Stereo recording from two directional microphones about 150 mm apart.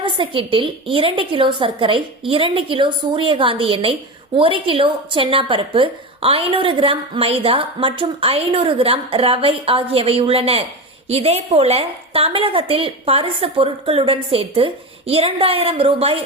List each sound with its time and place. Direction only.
0.0 s a woman's voice: 35° right (ahead or behind)